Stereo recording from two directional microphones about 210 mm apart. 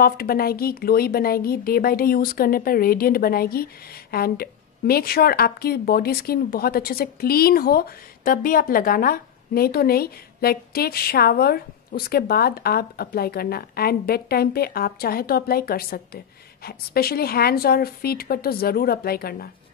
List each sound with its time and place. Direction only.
0.0 s a woman's voice: 45° left (ahead or behind)